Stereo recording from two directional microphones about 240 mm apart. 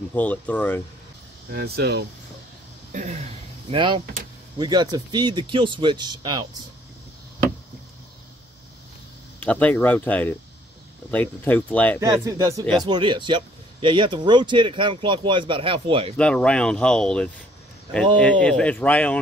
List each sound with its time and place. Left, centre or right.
0.1 s speech: centre
1.5 s speech: right
2.9 s speech: right
3.7 s speech: centre
9.4 s speech: centre
12.0 s speech: centre
16.2 s speech: centre